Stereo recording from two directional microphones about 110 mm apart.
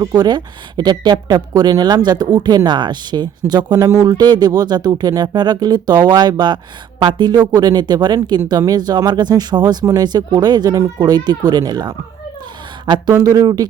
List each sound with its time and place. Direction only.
0.0 s speech: 35° right (ahead or behind)